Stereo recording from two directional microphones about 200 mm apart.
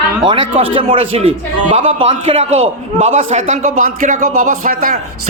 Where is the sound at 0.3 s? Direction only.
25° right (ahead or behind).